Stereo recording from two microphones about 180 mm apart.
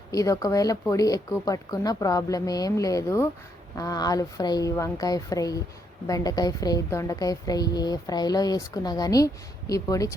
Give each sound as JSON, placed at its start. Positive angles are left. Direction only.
{"t": 0.1, "sound": "a woman's voice", "side_deg": 20}